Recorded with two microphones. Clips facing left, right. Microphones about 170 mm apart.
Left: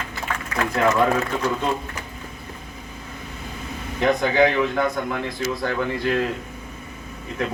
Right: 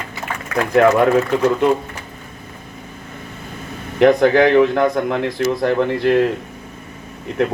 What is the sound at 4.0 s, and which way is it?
Speech, 90° right.